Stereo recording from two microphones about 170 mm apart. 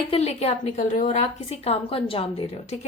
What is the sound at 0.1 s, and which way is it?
A woman's voice, 40° left (ahead or behind).